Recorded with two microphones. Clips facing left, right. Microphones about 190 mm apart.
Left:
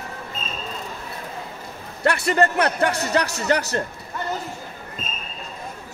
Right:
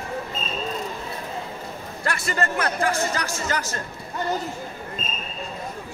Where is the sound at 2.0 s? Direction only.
65° left (ahead or behind).